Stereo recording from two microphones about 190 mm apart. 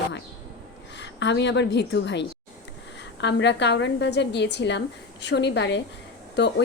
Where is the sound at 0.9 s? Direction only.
70° left (ahead or behind).